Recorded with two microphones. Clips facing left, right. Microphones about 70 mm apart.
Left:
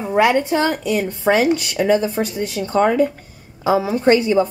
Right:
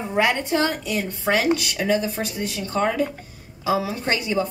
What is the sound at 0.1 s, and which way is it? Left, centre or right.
A woman's voice, left.